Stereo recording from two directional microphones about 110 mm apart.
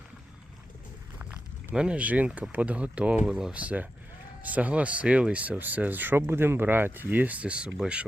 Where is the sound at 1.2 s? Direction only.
10° right (ahead or behind).